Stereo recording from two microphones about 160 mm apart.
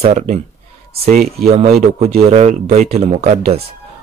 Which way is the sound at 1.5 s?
40° right (ahead or behind).